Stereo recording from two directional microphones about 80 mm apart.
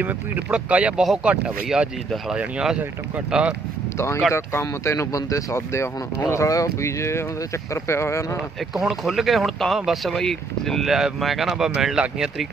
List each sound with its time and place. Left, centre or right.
0.0 s speech: centre
4.3 s speech: left
8.7 s speech: centre